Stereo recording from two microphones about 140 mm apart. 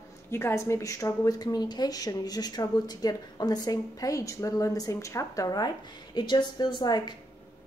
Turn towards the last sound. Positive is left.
turn(degrees=30)  # may be behind; listen again after turning